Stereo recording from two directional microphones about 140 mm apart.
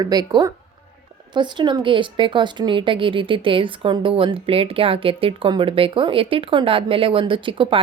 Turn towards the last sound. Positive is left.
turn(degrees=-35)  # may be behind; listen again after turning